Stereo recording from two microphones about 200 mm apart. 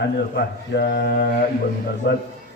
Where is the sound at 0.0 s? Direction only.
55° left (ahead or behind).